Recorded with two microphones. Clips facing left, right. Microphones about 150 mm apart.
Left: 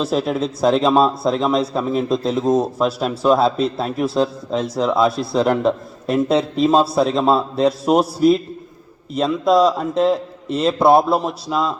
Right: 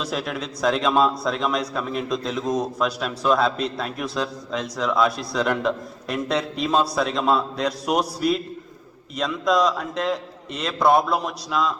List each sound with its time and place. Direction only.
0.0 s speech: 30° left (ahead or behind)
9.1 s speech: 30° left (ahead or behind)